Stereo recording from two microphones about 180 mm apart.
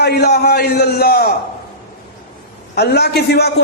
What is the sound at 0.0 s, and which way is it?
A man's voice, 65° left (ahead or behind).